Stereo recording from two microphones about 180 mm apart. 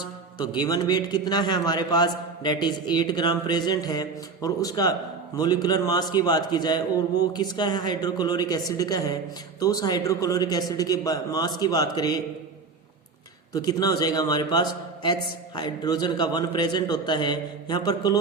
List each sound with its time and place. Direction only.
0.3 s a man's voice: 25° left (ahead or behind)
13.5 s a man's voice: 20° left (ahead or behind)